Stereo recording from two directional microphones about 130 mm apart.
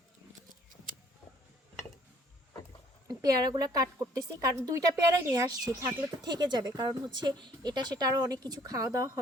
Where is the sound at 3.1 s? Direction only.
30° right (ahead or behind).